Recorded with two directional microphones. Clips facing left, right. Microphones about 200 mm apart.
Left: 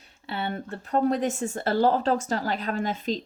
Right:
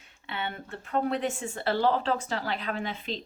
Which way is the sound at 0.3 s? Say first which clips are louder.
Left 5 dB; 40° left (ahead or behind).